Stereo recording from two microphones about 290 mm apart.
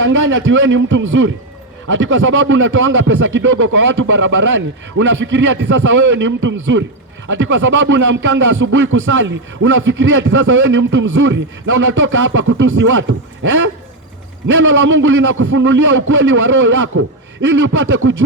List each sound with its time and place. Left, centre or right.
0.0 s speech: right
14.6 s speech: right